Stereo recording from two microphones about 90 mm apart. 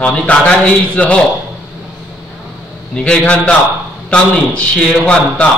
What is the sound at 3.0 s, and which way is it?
A man's voice, 10° left (ahead or behind).